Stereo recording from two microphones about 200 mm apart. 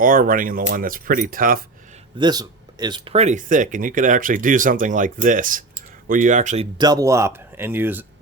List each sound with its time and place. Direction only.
0.0 s speech: 45° right (ahead or behind)
2.1 s speech: 20° right (ahead or behind); by 6.7 s 35° right (ahead or behind)
6.7 s speech: 20° right (ahead or behind)